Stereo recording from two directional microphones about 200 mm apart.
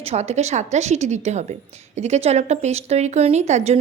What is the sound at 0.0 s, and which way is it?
Speech, 30° right (ahead or behind).